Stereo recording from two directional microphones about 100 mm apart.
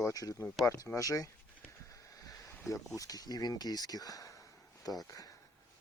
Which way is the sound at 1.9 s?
35° left (ahead or behind).